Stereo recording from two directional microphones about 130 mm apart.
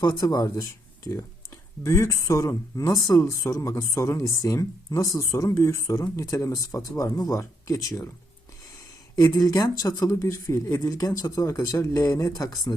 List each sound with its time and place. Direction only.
0.0 s speech: 30° left (ahead or behind)
1.8 s speech: 25° left (ahead or behind)
9.3 s speech: 30° left (ahead or behind)